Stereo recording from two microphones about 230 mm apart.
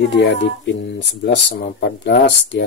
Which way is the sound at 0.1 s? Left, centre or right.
Left.